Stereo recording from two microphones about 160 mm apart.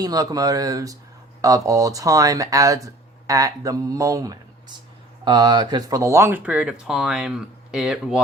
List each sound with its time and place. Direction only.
0.0 s speech: 25° right (ahead or behind); by 8.2 s 5° right (ahead or behind)